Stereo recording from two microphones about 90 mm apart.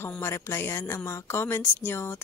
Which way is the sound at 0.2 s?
30° left (ahead or behind).